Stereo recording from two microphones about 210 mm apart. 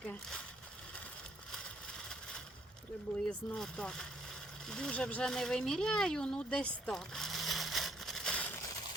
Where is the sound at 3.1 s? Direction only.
5° left (ahead or behind).